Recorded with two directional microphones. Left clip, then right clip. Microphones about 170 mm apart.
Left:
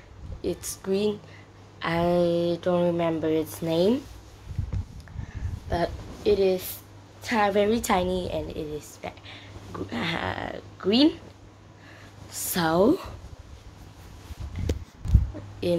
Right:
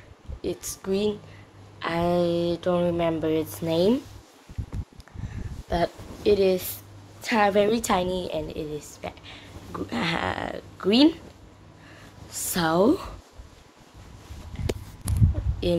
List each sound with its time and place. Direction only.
0.4 s speech: 5° left (ahead or behind)
5.7 s speech: 10° right (ahead or behind)
6.2 s a woman's voice: 25° right (ahead or behind)
7.5 s a woman's voice: 5° right (ahead or behind)
12.3 s speech: 5° right (ahead or behind)
15.6 s speech: 5° right (ahead or behind)